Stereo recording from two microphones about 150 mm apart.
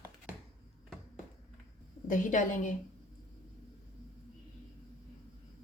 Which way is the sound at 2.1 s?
60° left (ahead or behind).